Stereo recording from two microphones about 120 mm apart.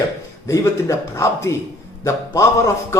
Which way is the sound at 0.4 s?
25° left (ahead or behind).